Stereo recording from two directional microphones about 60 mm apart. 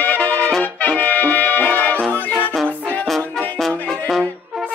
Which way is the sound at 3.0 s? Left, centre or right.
Centre.